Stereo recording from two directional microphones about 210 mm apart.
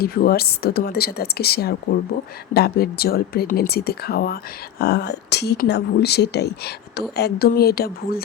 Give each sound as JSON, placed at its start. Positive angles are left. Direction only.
{"t": 0.0, "sound": "speech", "side_deg": 45}